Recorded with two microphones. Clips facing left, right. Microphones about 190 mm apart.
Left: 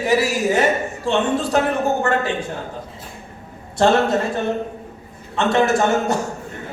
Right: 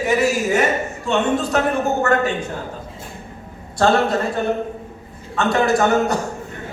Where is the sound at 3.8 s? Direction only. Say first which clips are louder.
Left 1 dB; 20° left (ahead or behind).